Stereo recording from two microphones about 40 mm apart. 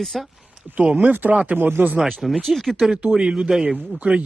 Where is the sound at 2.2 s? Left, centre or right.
Centre.